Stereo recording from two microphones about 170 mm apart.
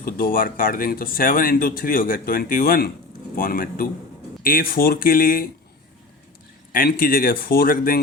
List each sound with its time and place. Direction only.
0.0 s speech: 60° left (ahead or behind)
6.7 s speech: 55° left (ahead or behind)